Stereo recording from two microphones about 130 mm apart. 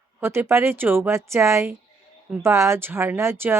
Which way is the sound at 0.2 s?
20° right (ahead or behind).